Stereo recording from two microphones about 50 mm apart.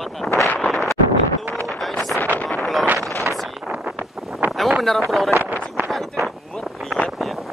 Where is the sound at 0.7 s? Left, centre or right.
Centre.